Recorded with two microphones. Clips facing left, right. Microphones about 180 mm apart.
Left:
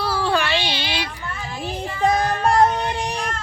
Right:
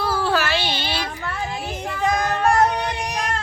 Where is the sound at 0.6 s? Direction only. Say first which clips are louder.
Even; 45° right (ahead or behind).